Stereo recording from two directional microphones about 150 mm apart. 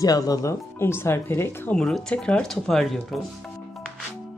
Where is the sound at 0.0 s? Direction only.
25° left (ahead or behind).